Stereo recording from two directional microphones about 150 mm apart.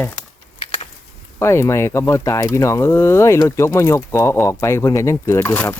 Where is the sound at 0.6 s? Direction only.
45° left (ahead or behind).